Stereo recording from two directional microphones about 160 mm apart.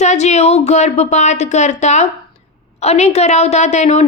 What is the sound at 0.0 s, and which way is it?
A woman's voice, 45° left (ahead or behind).